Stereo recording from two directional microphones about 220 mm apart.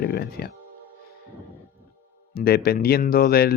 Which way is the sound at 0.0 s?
45° left (ahead or behind).